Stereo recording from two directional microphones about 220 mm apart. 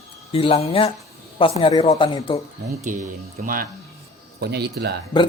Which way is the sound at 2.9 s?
35° right (ahead or behind).